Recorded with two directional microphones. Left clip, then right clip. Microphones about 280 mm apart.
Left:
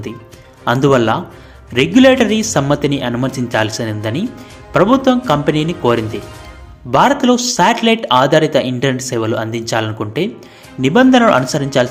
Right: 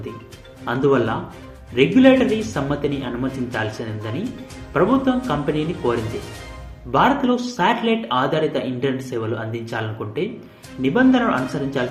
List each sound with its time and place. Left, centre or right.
0.6 s speech: left